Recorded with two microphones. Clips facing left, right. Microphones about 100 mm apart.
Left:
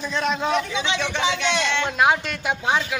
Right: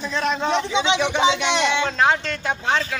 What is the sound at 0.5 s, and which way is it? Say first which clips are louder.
Speech: right 3 dB; 25° right (ahead or behind).